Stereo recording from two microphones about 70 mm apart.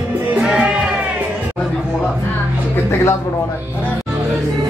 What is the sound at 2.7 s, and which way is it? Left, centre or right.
Music, left.